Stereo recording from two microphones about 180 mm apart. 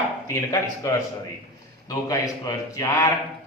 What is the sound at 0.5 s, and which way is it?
Speech, 20° left (ahead or behind).